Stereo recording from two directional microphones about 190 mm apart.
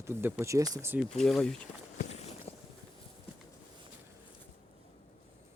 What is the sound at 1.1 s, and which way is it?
Speech, centre (ahead or behind).